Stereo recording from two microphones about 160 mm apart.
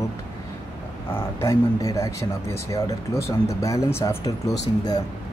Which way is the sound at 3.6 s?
20° left (ahead or behind).